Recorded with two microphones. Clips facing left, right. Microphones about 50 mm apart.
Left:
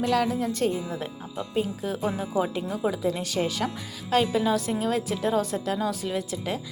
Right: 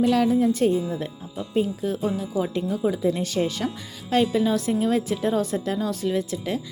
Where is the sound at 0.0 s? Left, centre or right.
Centre.